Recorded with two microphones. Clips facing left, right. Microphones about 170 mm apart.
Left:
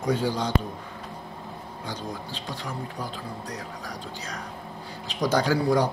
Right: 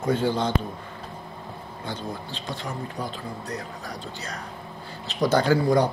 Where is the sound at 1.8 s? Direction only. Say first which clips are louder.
Right 2 dB; 10° left (ahead or behind).